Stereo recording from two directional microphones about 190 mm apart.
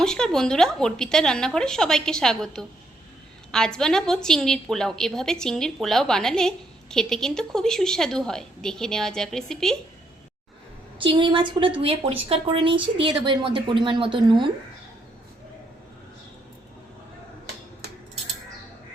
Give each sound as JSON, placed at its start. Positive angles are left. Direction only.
{"t": 0.0, "sound": "a woman's voice", "side_deg": 5}
{"t": 11.0, "sound": "speech", "side_deg": -25}